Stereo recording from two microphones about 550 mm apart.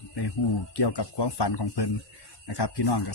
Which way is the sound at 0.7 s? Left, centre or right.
Left.